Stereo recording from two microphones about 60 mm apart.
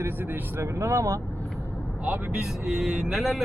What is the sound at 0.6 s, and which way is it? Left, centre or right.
Speech, right.